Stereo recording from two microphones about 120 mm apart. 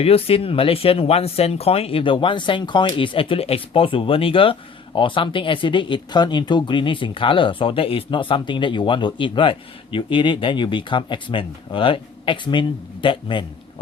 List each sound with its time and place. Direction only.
0.0 s speech: 55° left (ahead or behind)